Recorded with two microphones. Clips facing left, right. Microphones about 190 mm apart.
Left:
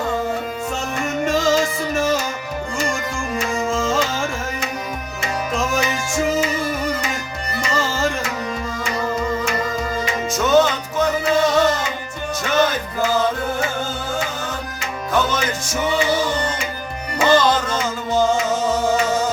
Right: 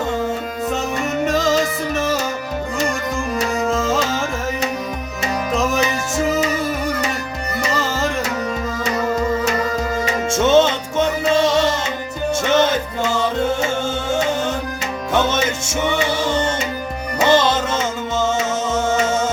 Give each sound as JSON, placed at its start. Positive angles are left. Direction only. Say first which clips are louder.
{"t": 1.2, "sound": "music", "louder": "even", "side_deg": 0}
{"t": 3.7, "sound": "music", "louder": "even", "side_deg": 0}
{"t": 5.5, "sound": "music", "louder": "right 3 dB", "side_deg": 0}
{"t": 10.2, "sound": "music", "louder": "right 2 dB", "side_deg": -25}
{"t": 15.1, "sound": "music", "louder": "right 2 dB", "side_deg": -25}
{"t": 17.2, "sound": "music", "louder": "even", "side_deg": -25}